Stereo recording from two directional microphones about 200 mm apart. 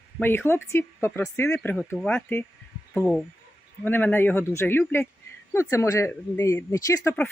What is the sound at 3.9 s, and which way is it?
Speech, 10° left (ahead or behind).